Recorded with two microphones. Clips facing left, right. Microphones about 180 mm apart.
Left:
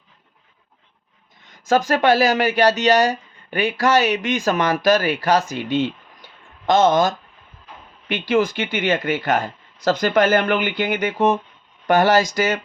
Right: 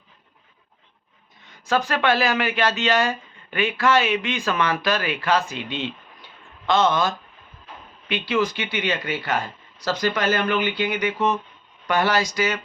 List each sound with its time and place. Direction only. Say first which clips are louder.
1.6 s speech: left 5 dB; 45° left (ahead or behind)